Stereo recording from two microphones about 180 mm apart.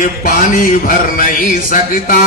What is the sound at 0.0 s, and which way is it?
A man's voice, 50° left (ahead or behind).